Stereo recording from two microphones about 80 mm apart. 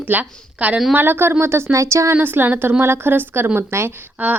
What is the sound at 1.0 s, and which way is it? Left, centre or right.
A woman's voice, right.